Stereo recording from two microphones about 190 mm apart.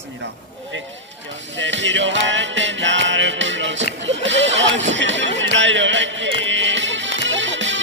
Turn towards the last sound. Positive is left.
turn(degrees=-75)  # may be behind; listen again after turning